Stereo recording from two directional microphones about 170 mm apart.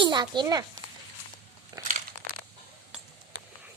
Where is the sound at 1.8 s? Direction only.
20° right (ahead or behind).